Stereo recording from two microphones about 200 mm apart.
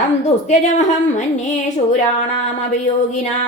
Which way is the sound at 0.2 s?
35° left (ahead or behind).